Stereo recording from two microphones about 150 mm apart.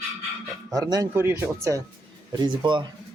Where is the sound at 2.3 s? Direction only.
30° right (ahead or behind).